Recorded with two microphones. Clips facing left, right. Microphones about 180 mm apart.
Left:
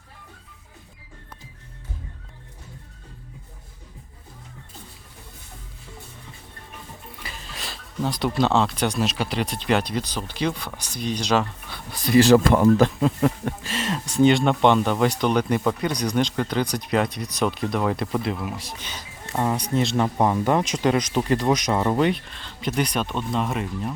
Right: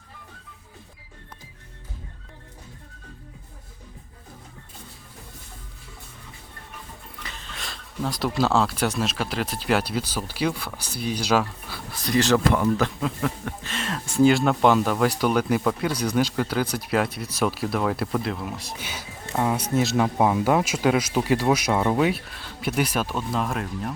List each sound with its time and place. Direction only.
7.2 s speech: 5° left (ahead or behind)
12.5 s speech: 45° left (ahead or behind)
12.8 s speech: 30° left (ahead or behind)
13.7 s speech: 5° left (ahead or behind)